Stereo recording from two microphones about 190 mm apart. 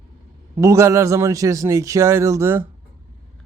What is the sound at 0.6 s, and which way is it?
A man's voice, 15° right (ahead or behind).